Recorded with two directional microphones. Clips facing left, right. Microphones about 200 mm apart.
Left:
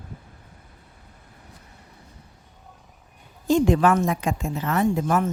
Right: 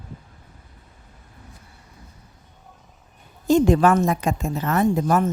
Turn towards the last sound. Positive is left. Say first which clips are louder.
# right 2 dB
turn(degrees=-40)  # may be behind; listen again after turning